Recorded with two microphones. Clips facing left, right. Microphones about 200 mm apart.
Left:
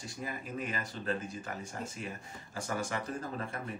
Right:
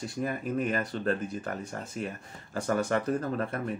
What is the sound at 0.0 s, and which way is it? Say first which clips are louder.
Speech: right 9 dB; 60° right (ahead or behind).